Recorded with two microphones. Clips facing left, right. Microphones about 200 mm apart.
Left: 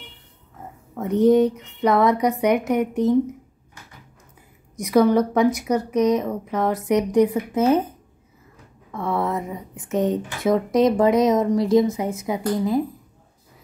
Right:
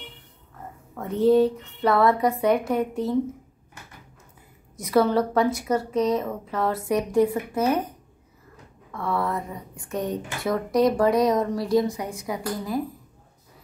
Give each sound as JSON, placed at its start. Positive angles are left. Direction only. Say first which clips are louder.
{"t": 0.9, "sound": "speech", "louder": "left 3 dB", "side_deg": 20}
{"t": 4.7, "sound": "a woman's voice", "louder": "left 4 dB", "side_deg": 15}
{"t": 8.9, "sound": "speech", "louder": "left 3 dB", "side_deg": 20}